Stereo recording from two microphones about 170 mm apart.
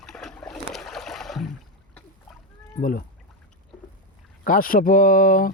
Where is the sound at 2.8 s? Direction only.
55° left (ahead or behind).